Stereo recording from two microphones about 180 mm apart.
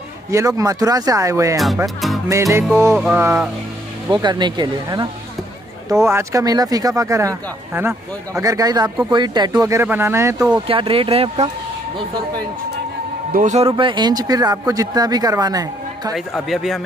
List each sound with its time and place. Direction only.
0.3 s speech: 15° right (ahead or behind)
4.1 s speech: 25° right (ahead or behind)
10.5 s speech: 30° right (ahead or behind)
13.3 s speech: 45° right (ahead or behind); by 16.1 s 20° right (ahead or behind)
16.1 s a man's voice: centre (ahead or behind)